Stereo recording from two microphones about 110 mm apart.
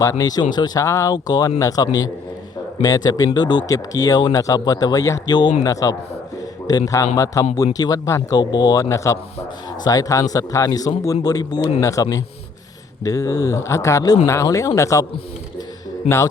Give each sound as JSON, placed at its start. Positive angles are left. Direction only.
{"t": 0.0, "sound": "speech", "side_deg": 35}
{"t": 16.0, "sound": "speech", "side_deg": 25}